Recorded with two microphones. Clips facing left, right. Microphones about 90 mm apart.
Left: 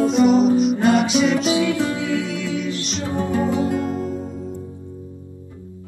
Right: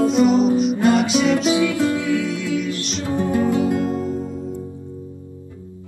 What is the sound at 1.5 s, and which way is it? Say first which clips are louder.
Music: right 1 dB; 20° left (ahead or behind).